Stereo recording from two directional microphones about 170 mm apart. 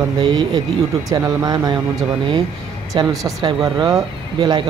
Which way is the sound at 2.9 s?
20° right (ahead or behind).